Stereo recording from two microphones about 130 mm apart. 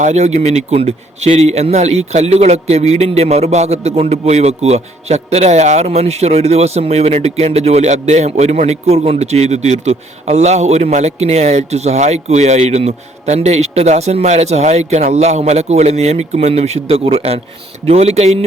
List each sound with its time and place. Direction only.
0.0 s a man's voice: 60° right (ahead or behind)